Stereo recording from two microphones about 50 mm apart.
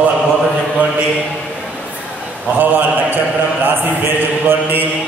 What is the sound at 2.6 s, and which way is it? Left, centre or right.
A man's voice, right.